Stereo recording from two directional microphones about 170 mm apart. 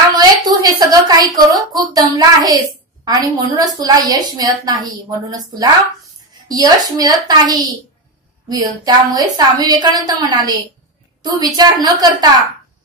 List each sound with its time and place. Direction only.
0.2 s a woman's voice: 25° right (ahead or behind)